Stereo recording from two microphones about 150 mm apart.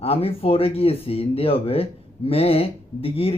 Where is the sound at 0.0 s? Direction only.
40° left (ahead or behind).